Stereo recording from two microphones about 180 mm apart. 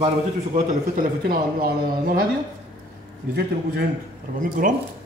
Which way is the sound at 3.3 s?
65° right (ahead or behind).